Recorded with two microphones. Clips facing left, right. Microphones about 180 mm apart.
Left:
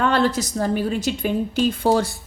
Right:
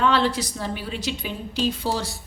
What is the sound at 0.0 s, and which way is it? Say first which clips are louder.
A woman's voice: left 2 dB; 45° left (ahead or behind).